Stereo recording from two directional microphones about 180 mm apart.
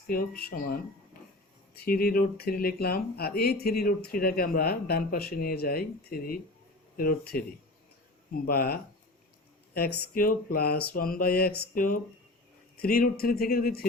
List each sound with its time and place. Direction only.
0.1 s speech: 55° left (ahead or behind)
8.4 s speech: 60° left (ahead or behind)
10.2 s speech: 55° left (ahead or behind)